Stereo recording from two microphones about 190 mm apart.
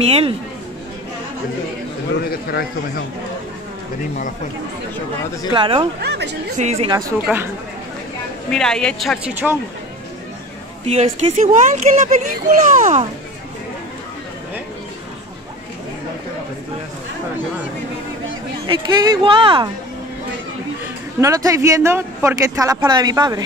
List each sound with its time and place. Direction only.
0.0 s a child's voice: 30° right (ahead or behind)
2.2 s a man's voice: 55° left (ahead or behind)
5.5 s speech: 25° right (ahead or behind)
5.9 s speech: 60° right (ahead or behind)
6.6 s a child's voice: 30° right (ahead or behind)
7.0 s speech: 15° right (ahead or behind)
8.5 s a woman's voice: 5° left (ahead or behind)
9.3 s speech: 10° right (ahead or behind)
10.9 s a child's voice: 35° right (ahead or behind)
18.7 s speech: 25° right (ahead or behind)
21.2 s speech: 15° right (ahead or behind)